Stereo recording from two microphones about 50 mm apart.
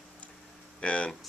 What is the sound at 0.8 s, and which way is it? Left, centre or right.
Speech, left.